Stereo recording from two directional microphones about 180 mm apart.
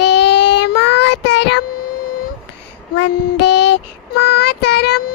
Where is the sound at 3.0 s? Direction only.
70° left (ahead or behind).